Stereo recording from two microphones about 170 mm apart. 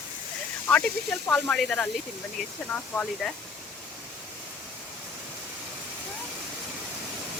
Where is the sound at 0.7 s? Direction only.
5° left (ahead or behind).